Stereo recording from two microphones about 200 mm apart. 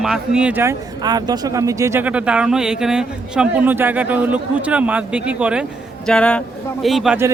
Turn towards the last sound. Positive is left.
turn(degrees=-5)  # may be behind; listen again after turning